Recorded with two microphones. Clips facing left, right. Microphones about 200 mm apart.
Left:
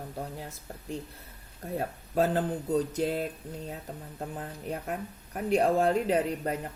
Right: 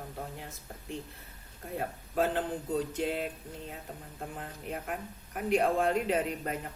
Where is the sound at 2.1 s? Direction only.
40° left (ahead or behind).